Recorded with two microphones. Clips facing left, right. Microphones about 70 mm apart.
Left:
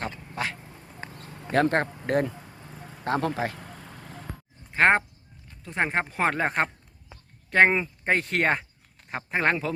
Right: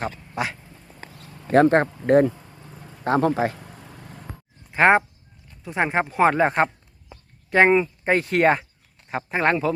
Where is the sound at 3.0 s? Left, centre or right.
Right.